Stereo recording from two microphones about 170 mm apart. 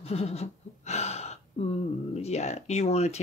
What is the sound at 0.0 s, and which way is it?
Gasp, 35° left (ahead or behind).